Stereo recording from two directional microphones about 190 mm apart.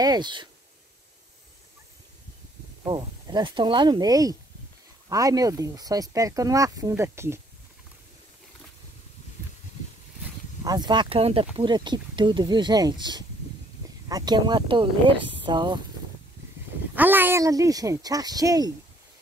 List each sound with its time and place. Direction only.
0.0 s speech: 20° right (ahead or behind)
2.8 s speech: 25° right (ahead or behind)
10.6 s speech: 20° right (ahead or behind)
16.9 s speech: 10° right (ahead or behind)